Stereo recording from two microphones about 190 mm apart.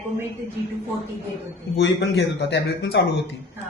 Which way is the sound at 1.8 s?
60° left (ahead or behind).